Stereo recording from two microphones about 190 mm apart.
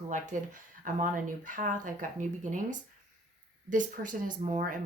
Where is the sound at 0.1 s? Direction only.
40° right (ahead or behind).